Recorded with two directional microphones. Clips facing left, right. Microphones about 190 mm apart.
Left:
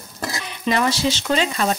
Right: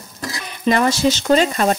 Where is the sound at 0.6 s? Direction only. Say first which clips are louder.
Right 4 dB; 45° right (ahead or behind).